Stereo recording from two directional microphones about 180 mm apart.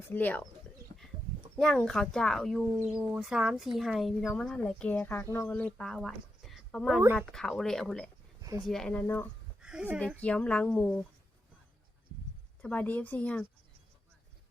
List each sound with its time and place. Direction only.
0.1 s speech: 10° left (ahead or behind)
1.5 s speech: 5° left (ahead or behind)
8.4 s a sound: 20° right (ahead or behind)
8.6 s speech: 5° left (ahead or behind)
9.6 s a sound: 5° right (ahead or behind)
10.2 s speech: 5° left (ahead or behind)
12.6 s speech: 10° left (ahead or behind)